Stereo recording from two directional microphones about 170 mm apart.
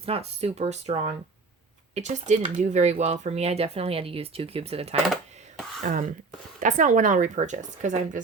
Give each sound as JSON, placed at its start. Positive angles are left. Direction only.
{"t": 0.0, "sound": "speech", "side_deg": -35}
{"t": 5.8, "sound": "speech", "side_deg": -50}